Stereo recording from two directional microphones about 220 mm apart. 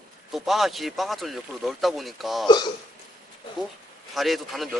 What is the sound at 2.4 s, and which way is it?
Speech, 20° left (ahead or behind).